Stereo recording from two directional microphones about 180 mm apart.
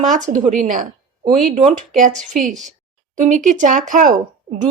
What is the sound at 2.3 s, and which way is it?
A woman's voice, 45° right (ahead or behind).